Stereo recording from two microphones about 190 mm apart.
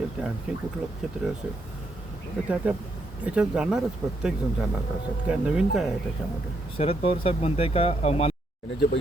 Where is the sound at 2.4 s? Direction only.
5° right (ahead or behind).